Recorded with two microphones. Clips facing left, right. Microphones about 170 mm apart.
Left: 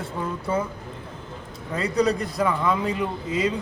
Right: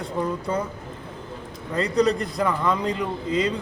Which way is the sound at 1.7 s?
Centre (ahead or behind).